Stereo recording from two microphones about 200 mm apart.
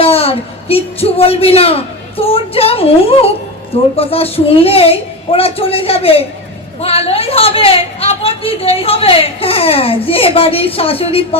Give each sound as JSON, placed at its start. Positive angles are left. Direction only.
{"t": 0.0, "sound": "a woman's voice", "side_deg": 30}